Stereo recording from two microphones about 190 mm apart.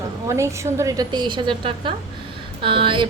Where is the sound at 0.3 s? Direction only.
15° right (ahead or behind).